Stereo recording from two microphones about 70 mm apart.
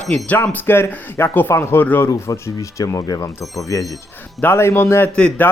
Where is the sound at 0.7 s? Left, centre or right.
Left.